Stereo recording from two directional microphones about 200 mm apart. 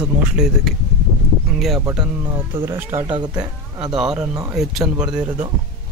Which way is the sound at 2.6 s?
10° right (ahead or behind).